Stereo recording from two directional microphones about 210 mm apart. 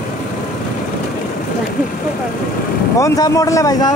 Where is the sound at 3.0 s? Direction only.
15° left (ahead or behind).